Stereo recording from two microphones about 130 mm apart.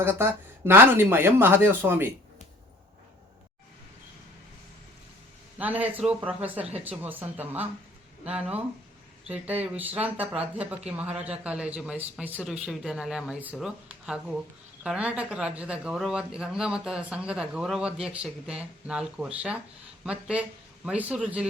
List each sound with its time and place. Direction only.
0.0 s a man's voice: 15° right (ahead or behind)
5.5 s a man's voice: 10° right (ahead or behind)